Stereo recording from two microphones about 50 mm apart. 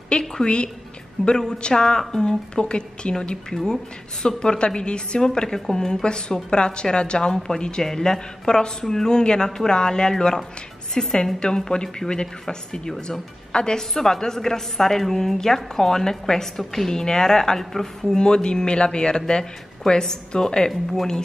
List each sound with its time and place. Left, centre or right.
0.1 s a woman's voice: centre
20.7 s speech: centre